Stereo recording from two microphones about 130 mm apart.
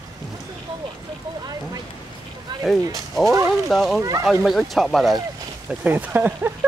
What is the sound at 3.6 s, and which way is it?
Speech, centre (ahead or behind).